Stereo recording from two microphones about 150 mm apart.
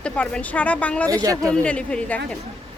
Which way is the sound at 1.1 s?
25° right (ahead or behind).